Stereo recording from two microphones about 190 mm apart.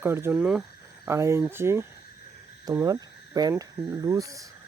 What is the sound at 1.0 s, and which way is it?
Speech, 15° right (ahead or behind).